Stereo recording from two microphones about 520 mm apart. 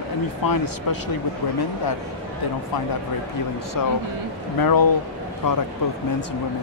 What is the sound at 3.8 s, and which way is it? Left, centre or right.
Speech, left.